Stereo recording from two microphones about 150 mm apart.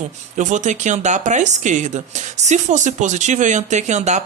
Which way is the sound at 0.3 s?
55° right (ahead or behind).